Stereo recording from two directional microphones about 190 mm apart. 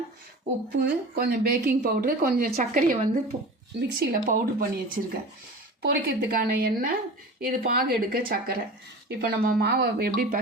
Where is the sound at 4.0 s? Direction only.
50° right (ahead or behind).